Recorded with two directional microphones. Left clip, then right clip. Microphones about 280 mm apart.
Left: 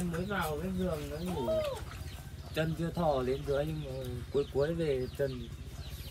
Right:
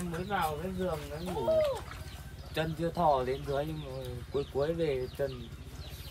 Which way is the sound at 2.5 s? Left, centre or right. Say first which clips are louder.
Right 3 dB; right.